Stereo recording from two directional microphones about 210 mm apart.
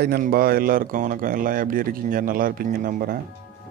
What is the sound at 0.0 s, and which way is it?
Speech, 45° right (ahead or behind).